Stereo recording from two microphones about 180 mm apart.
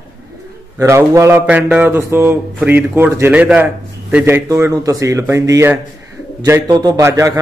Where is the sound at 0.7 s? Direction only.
15° right (ahead or behind).